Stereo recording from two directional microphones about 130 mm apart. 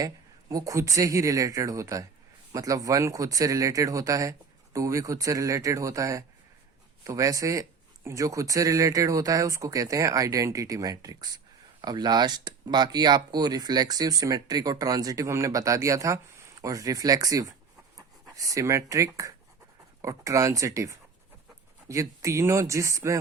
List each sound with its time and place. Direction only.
0.0 s speech: 25° right (ahead or behind)